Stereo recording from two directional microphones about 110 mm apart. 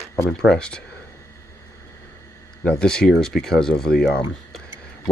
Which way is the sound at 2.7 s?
10° left (ahead or behind).